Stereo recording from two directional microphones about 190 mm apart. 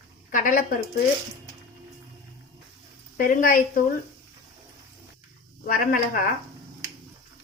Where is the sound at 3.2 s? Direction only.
45° left (ahead or behind).